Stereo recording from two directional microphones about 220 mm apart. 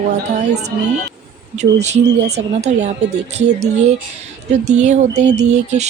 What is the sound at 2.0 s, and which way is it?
Speech, 50° right (ahead or behind).